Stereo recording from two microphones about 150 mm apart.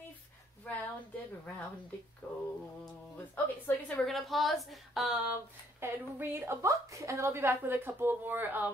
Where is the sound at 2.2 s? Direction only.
10° left (ahead or behind).